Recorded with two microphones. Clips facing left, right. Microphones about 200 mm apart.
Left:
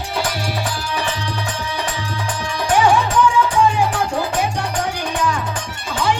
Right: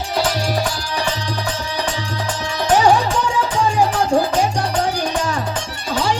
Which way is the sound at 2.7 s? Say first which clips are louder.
Even; 40° right (ahead or behind).